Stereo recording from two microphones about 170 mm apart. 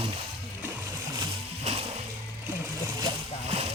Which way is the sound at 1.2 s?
35° right (ahead or behind).